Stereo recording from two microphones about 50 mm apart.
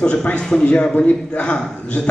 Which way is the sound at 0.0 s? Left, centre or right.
Left.